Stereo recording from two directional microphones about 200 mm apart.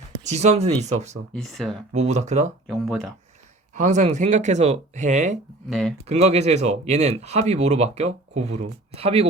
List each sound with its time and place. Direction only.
0.3 s speech: 35° right (ahead or behind)
1.3 s speech: centre (ahead or behind)
1.9 s speech: 35° right (ahead or behind)
2.6 s speech: centre (ahead or behind)
3.8 s speech: 35° right (ahead or behind)
5.6 s speech: centre (ahead or behind)
6.1 s speech: 30° right (ahead or behind)